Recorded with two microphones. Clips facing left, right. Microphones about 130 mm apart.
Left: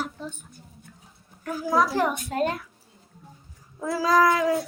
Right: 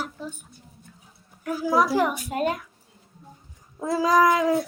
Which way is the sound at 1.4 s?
10° right (ahead or behind).